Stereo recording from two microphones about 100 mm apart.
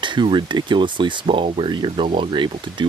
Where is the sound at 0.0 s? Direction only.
50° right (ahead or behind).